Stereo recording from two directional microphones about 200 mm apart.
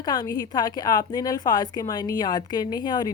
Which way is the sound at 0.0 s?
20° left (ahead or behind).